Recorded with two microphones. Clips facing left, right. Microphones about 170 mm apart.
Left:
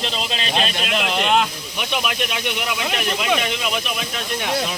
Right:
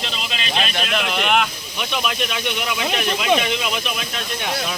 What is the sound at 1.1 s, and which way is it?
Speech, 25° left (ahead or behind).